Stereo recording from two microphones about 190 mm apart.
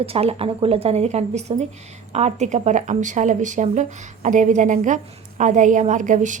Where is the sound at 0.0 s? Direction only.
30° right (ahead or behind).